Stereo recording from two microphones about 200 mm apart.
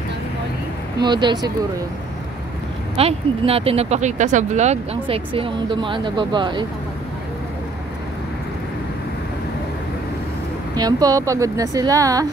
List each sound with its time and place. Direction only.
1.0 s speech: 20° right (ahead or behind)
3.0 s speech: 30° right (ahead or behind)
10.8 s speech: 20° right (ahead or behind)